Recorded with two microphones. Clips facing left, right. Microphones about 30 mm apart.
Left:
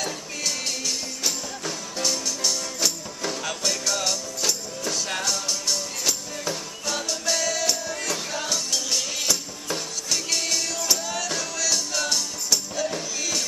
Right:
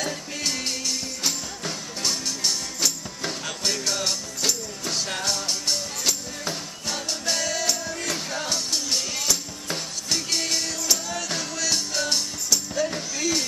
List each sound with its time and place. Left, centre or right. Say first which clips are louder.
0.0 s music: right 1 dB; centre
3.6 s music: even; centre
9.7 s music: even; centre
10.8 s music: left 1 dB; centre
11.1 s music: left 1 dB; centre